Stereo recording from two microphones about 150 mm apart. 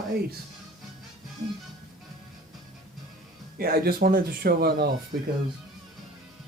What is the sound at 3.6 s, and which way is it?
Speech, 90° right.